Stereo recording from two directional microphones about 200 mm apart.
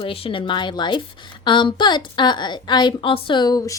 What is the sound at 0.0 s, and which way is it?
A woman's voice, 30° left (ahead or behind).